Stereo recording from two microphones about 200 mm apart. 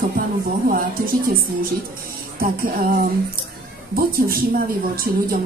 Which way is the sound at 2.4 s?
45° right (ahead or behind).